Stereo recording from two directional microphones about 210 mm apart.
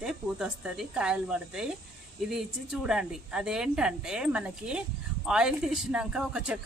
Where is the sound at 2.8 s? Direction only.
5° right (ahead or behind).